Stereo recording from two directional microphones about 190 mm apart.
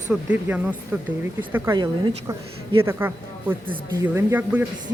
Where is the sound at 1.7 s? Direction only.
20° right (ahead or behind).